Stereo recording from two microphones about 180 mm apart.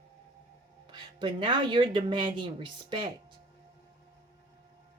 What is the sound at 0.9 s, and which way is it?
Speech, 25° right (ahead or behind).